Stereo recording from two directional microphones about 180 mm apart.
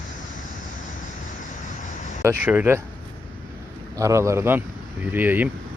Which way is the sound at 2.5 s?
10° right (ahead or behind).